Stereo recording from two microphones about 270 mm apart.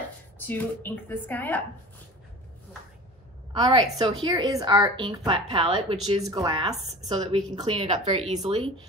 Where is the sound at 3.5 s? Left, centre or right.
Centre.